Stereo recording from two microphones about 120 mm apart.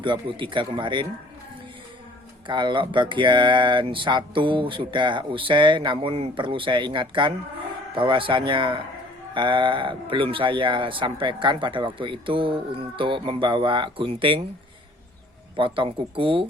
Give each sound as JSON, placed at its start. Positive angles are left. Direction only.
{"t": 0.0, "sound": "speech", "side_deg": -45}
{"t": 2.5, "sound": "speech", "side_deg": -40}
{"t": 15.5, "sound": "speech", "side_deg": -45}